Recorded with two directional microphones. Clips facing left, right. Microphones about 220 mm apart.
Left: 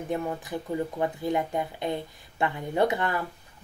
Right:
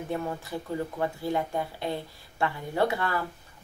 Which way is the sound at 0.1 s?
15° left (ahead or behind).